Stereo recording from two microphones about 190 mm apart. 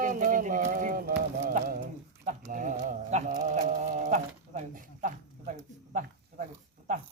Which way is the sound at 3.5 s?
40° right (ahead or behind).